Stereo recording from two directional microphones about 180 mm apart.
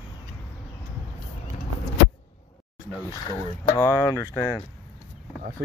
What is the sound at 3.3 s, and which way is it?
Speech, 15° left (ahead or behind).